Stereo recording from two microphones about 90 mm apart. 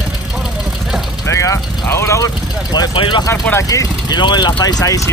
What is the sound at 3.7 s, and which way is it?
Speech, 45° left (ahead or behind).